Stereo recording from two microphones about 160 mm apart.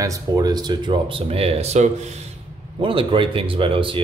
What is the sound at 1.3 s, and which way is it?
Speech, 40° right (ahead or behind).